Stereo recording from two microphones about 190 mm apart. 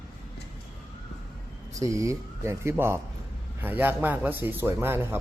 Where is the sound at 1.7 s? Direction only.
15° right (ahead or behind).